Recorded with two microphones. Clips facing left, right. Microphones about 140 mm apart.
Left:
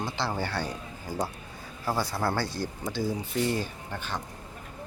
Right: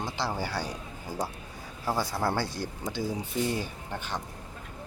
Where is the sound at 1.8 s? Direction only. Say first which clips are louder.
Even; 15° right (ahead or behind).